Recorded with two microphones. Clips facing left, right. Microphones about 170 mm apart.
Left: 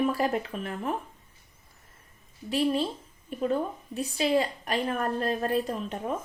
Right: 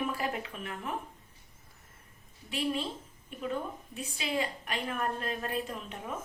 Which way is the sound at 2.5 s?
40° left (ahead or behind).